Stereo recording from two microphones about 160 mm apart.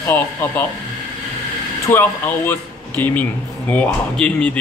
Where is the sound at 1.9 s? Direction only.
15° left (ahead or behind).